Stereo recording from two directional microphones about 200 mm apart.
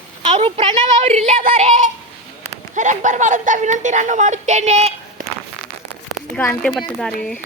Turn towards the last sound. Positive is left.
turn(degrees=0)  # may be behind; listen again after turning